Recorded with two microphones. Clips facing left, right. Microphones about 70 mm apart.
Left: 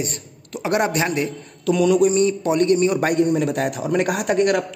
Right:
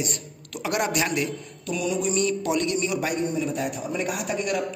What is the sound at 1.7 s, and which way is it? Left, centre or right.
Mantra, left.